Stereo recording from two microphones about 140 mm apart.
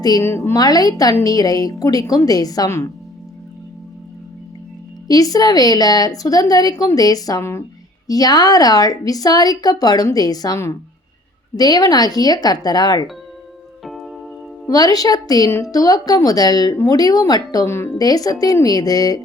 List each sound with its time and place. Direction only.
0.0 s speech: 25° left (ahead or behind)
5.0 s speech: 25° left (ahead or behind)
13.8 s music: centre (ahead or behind)
14.7 s speech: 25° left (ahead or behind)